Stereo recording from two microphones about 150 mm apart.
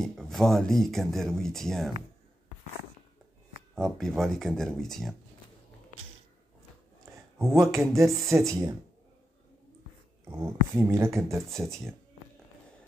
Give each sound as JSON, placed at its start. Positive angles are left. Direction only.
{"t": 0.0, "sound": "speech", "side_deg": 0}
{"t": 3.7, "sound": "speech", "side_deg": 0}
{"t": 7.3, "sound": "speech", "side_deg": -20}
{"t": 10.3, "sound": "speech", "side_deg": -15}